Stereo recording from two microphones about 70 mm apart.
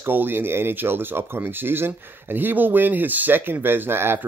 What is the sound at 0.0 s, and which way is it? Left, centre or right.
Speech, right.